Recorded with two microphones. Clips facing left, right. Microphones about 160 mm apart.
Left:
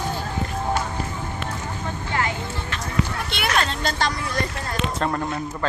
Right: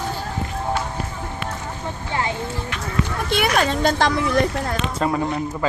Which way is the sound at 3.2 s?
45° right (ahead or behind).